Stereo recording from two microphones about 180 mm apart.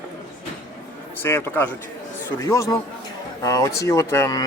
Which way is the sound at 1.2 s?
10° left (ahead or behind).